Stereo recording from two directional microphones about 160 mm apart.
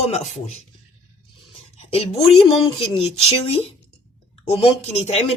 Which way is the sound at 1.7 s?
40° left (ahead or behind).